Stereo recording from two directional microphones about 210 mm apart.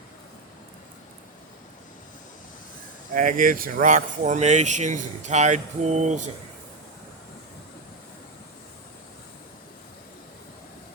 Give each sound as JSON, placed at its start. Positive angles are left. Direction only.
{"t": 3.2, "sound": "speech", "side_deg": -40}